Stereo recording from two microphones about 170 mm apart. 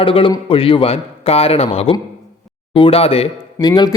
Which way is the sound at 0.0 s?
30° left (ahead or behind).